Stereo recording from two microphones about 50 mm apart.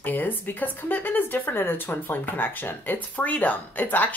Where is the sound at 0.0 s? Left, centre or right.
Left.